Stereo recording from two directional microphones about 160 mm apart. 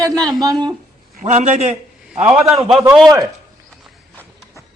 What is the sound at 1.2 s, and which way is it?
Speech, 45° right (ahead or behind).